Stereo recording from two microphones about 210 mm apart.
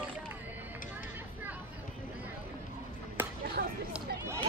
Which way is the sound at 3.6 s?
45° right (ahead or behind).